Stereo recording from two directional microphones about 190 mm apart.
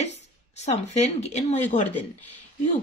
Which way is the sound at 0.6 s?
35° left (ahead or behind).